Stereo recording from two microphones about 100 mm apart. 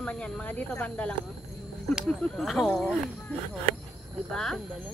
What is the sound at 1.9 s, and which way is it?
Speech, centre (ahead or behind).